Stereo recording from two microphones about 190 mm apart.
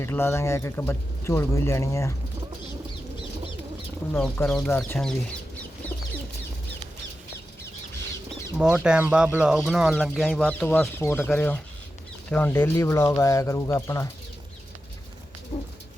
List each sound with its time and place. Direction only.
0.0 s speech: 10° left (ahead or behind)
4.1 s speech: 5° left (ahead or behind)
4.9 s chicken: 5° left (ahead or behind)
8.5 s speech: 5° right (ahead or behind); by 14.1 s 15° left (ahead or behind)
15.5 s a sound: 35° left (ahead or behind)